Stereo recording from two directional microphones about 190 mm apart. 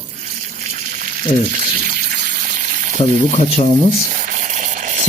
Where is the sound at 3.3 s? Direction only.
40° left (ahead or behind).